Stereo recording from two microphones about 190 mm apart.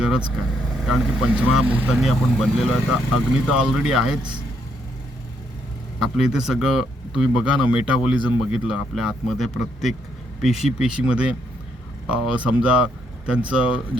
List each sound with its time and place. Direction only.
0.0 s speech: 5° right (ahead or behind)
6.0 s speech: centre (ahead or behind)